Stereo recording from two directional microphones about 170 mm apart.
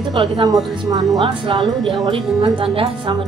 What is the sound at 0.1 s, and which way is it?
A woman's voice, 25° right (ahead or behind).